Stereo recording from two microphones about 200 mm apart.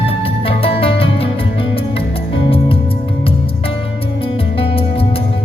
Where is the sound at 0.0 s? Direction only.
30° left (ahead or behind).